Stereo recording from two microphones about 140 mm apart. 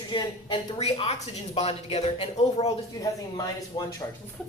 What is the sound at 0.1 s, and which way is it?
A woman's voice, 35° left (ahead or behind).